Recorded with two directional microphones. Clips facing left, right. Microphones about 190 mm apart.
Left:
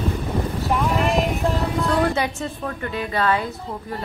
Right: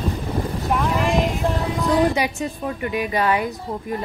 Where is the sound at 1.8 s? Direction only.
15° right (ahead or behind).